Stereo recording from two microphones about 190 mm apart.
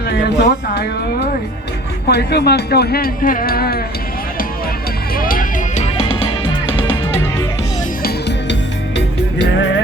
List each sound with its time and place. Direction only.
0.1 s speech: 60° left (ahead or behind)
2.0 s speech: 60° left (ahead or behind)
5.1 s music: 50° left (ahead or behind); by 7.3 s 25° left (ahead or behind)
9.0 s music: 70° left (ahead or behind)